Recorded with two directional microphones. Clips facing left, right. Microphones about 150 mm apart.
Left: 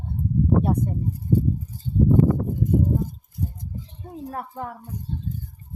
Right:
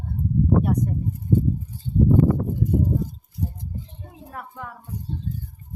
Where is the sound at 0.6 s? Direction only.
30° left (ahead or behind).